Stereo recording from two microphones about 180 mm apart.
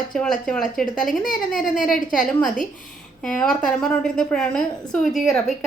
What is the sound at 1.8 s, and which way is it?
Speech, 50° left (ahead or behind).